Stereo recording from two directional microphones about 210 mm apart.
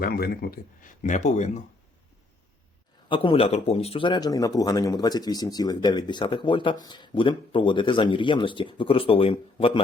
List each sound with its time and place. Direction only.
0.0 s speech: 45° left (ahead or behind)
3.1 s speech: 25° left (ahead or behind)